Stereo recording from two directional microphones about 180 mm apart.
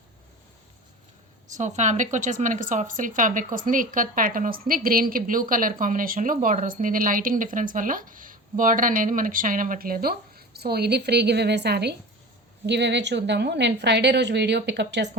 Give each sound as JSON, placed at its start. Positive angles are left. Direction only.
{"t": 1.5, "sound": "a woman's voice", "side_deg": -40}